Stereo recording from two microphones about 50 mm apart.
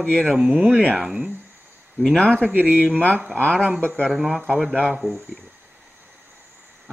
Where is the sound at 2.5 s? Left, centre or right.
Right.